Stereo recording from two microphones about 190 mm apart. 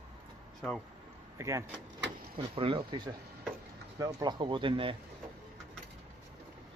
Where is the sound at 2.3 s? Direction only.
30° right (ahead or behind).